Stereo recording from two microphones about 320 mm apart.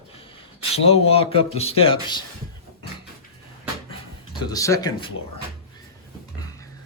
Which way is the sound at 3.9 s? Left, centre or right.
Centre.